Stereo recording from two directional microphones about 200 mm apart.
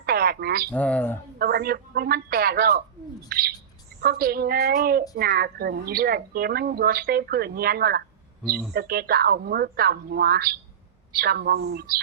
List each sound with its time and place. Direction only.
0.0 s radio: 50° right (ahead or behind)
0.7 s speech: 5° left (ahead or behind)
1.4 s a woman's voice: 50° right (ahead or behind)
3.2 s bird: 50° right (ahead or behind)
4.0 s a woman's voice: 50° right (ahead or behind)